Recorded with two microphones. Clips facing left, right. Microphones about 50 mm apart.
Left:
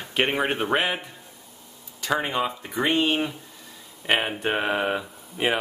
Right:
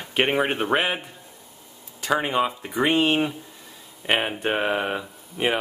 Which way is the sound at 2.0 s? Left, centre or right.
Centre.